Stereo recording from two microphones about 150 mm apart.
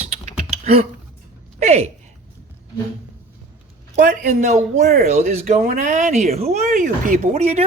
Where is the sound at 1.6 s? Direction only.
50° right (ahead or behind).